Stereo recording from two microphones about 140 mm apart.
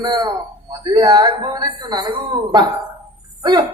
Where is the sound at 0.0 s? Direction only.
30° right (ahead or behind).